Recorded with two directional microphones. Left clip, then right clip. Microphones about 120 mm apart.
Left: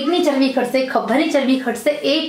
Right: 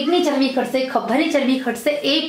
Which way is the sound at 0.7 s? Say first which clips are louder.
Left 2 dB; centre (ahead or behind).